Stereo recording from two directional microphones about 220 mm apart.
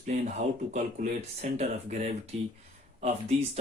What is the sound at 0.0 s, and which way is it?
A man's voice, 30° right (ahead or behind).